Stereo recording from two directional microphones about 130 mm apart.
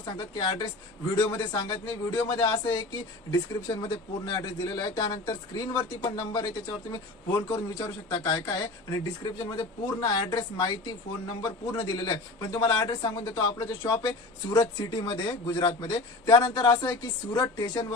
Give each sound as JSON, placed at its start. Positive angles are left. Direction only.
{"t": 0.0, "sound": "speech", "side_deg": 35}
{"t": 1.3, "sound": "speech", "side_deg": 25}